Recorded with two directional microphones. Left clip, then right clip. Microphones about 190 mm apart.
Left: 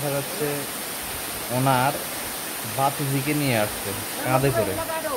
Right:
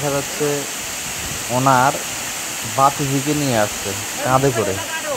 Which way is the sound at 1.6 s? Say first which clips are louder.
Right 7 dB; 15° right (ahead or behind).